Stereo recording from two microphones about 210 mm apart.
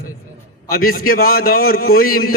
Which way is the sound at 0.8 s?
45° left (ahead or behind).